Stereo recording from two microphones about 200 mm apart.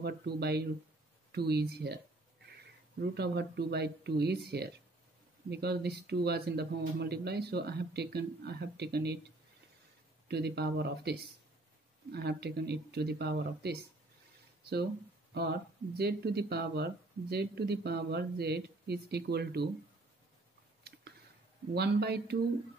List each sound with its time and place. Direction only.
0.0 s speech: 55° right (ahead or behind)
3.0 s speech: 55° right (ahead or behind)
10.2 s speech: 55° right (ahead or behind)
16.0 s speech: 50° right (ahead or behind)
21.7 s speech: 55° right (ahead or behind)